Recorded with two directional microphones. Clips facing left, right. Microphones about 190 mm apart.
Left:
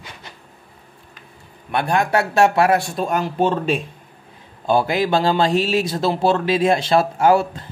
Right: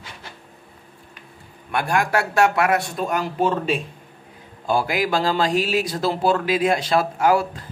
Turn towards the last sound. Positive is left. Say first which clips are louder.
# left 3 dB
turn(degrees=25)  # may be behind; listen again after turning